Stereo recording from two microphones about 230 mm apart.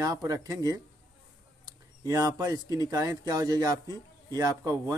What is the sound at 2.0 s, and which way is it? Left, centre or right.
Speech, centre.